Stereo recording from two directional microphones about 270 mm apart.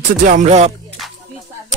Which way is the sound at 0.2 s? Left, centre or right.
Right.